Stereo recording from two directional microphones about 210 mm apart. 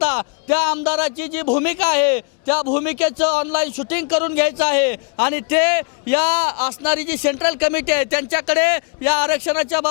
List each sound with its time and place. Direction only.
0.0 s a sound: 15° left (ahead or behind)
0.5 s speech: 15° left (ahead or behind)
2.5 s a man's voice: 30° left (ahead or behind)
2.8 s speech: 15° left (ahead or behind)